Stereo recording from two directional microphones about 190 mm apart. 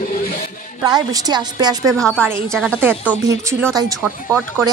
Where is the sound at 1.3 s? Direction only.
20° right (ahead or behind).